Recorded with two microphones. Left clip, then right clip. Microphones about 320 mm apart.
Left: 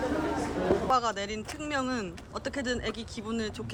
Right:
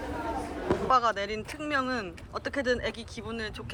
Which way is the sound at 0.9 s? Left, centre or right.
Centre.